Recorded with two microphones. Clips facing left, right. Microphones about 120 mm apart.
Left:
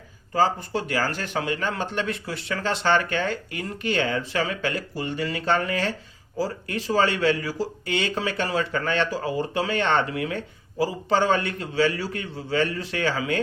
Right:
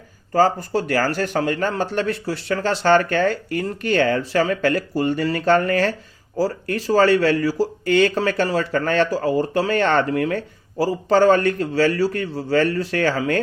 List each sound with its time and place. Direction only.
0.3 s speech: 40° right (ahead or behind)